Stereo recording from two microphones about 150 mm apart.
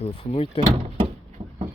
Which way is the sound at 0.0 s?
40° left (ahead or behind).